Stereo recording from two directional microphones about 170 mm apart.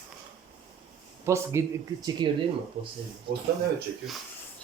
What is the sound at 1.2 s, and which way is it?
Speech, 15° right (ahead or behind).